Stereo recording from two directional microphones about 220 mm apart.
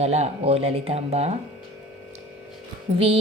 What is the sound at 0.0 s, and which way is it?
Music, 30° right (ahead or behind).